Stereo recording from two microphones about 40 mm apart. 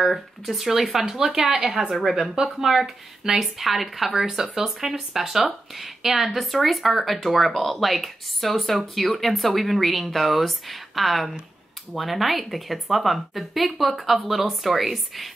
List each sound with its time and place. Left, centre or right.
0.0 s speech: centre